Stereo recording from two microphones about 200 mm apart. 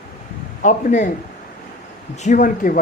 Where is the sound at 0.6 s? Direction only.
40° left (ahead or behind).